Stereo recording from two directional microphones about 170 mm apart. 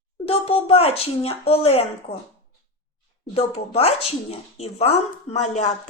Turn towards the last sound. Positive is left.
turn(degrees=40)  # may be behind; listen again after turning